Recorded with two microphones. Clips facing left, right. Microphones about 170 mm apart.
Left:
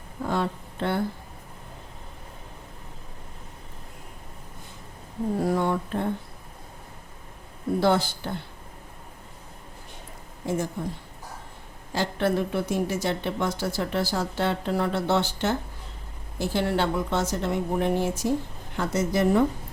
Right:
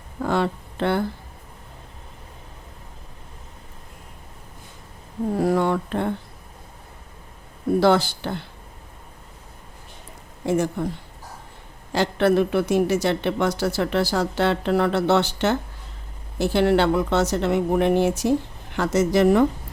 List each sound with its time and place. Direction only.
0.2 s speech: 75° right (ahead or behind)
5.4 s speech: 80° right
7.8 s speech: 80° right
10.4 s speech: 75° right (ahead or behind)
11.9 s speech: 75° right (ahead or behind)